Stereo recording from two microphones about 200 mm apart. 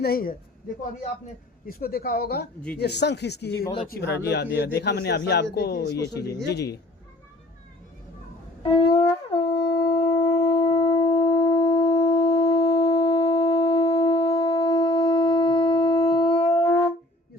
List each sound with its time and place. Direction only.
0.0 s speech: 50° left (ahead or behind)
1.6 s a man's voice: 50° left (ahead or behind)
8.7 s wind instrument: 25° left (ahead or behind)